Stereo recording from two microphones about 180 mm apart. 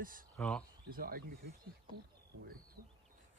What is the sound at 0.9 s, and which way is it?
Speech, 55° right (ahead or behind).